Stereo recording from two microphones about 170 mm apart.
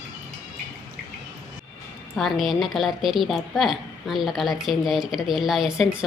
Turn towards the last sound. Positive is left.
turn(degrees=0)  # may be behind; listen again after turning